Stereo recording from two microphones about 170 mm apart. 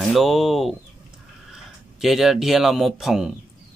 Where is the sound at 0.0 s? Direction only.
Centre (ahead or behind).